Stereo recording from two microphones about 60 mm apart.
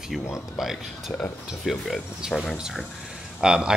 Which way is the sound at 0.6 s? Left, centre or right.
Centre.